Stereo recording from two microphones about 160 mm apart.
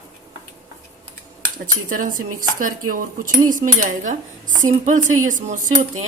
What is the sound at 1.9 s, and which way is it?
Speech, 60° right (ahead or behind).